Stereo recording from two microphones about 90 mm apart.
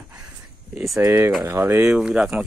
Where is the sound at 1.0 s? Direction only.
25° right (ahead or behind).